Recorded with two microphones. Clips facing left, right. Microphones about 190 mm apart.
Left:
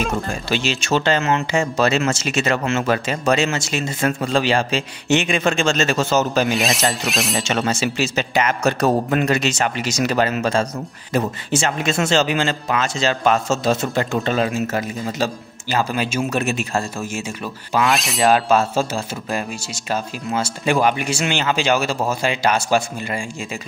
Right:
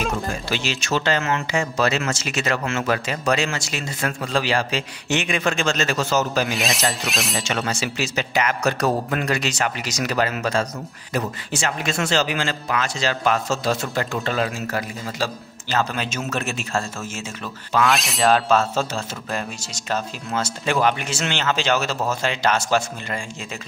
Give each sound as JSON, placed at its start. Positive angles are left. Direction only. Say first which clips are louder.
{"t": 0.5, "sound": "speech", "louder": "left 6 dB", "side_deg": 25}
{"t": 6.5, "sound": "zipper", "louder": "left 4 dB", "side_deg": 0}
{"t": 7.3, "sound": "speech", "louder": "left 4 dB", "side_deg": 25}
{"t": 15.8, "sound": "speech", "louder": "left 6 dB", "side_deg": 10}
{"t": 17.7, "sound": "speech", "louder": "left 1 dB", "side_deg": 0}